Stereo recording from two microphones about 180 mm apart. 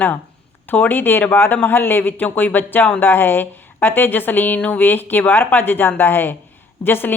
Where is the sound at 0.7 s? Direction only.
10° left (ahead or behind).